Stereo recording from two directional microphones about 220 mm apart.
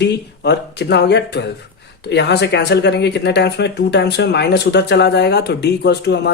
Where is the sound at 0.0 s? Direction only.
50° left (ahead or behind).